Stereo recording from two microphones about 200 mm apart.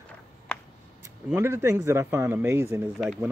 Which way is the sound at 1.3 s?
10° right (ahead or behind).